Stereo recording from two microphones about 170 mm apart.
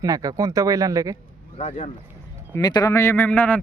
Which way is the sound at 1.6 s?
40° left (ahead or behind).